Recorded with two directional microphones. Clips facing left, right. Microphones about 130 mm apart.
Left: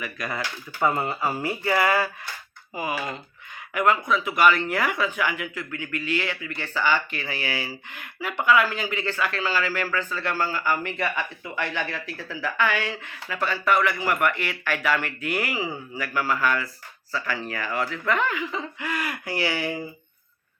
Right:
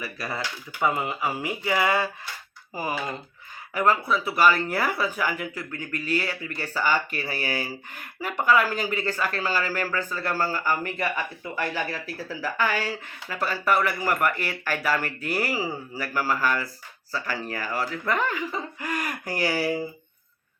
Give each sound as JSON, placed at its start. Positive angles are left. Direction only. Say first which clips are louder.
{"t": 0.2, "sound": "speech", "louder": "left 1 dB", "side_deg": -30}
{"t": 0.8, "sound": "speech", "louder": "left 1 dB", "side_deg": -15}
{"t": 2.7, "sound": "speech", "louder": "left 1 dB", "side_deg": 15}
{"t": 3.8, "sound": "speech", "louder": "left 1 dB", "side_deg": -35}
{"t": 11.8, "sound": "speech", "louder": "even", "side_deg": -10}
{"t": 12.3, "sound": "speech", "louder": "left 1 dB", "side_deg": -40}